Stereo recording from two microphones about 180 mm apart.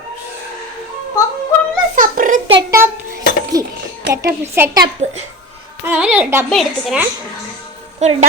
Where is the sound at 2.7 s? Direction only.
15° right (ahead or behind).